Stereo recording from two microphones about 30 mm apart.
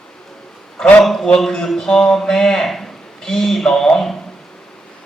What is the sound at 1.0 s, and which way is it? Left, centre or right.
A man's voice, centre.